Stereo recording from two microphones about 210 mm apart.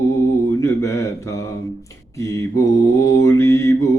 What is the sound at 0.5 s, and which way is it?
Mantra, 15° left (ahead or behind).